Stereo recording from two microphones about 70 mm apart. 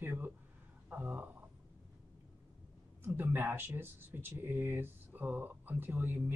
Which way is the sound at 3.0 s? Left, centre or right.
Right.